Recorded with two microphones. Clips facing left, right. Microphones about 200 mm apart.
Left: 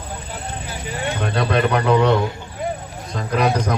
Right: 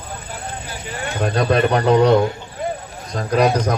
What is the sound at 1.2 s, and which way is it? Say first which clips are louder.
Speech: right 3 dB; 35° right (ahead or behind).